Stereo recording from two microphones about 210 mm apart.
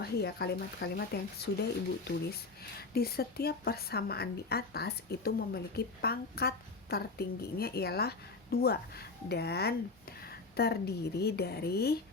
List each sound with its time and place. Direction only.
0.0 s a woman's voice: 50° left (ahead or behind)
2.9 s a woman's voice: 45° left (ahead or behind)